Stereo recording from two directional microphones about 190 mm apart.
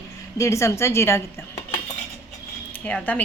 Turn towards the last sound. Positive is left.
turn(degrees=5)  # may be behind; listen again after turning